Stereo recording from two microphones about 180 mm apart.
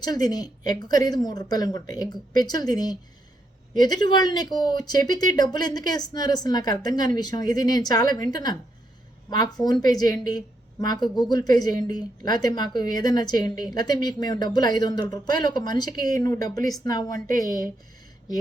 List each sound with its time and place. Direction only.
0.0 s a woman's voice: 20° left (ahead or behind)